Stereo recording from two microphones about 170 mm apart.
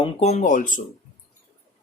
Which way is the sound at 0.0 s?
40° left (ahead or behind).